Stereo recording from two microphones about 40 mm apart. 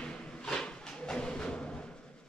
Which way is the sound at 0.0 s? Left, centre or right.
Left.